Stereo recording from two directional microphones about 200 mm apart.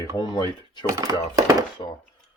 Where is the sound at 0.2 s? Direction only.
20° left (ahead or behind).